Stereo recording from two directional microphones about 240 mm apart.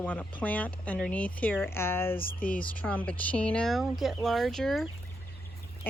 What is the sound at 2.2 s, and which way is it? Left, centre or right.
Speech, left.